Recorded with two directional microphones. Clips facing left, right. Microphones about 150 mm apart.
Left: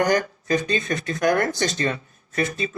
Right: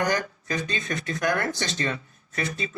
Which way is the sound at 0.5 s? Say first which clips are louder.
Left 7 dB; 40° left (ahead or behind).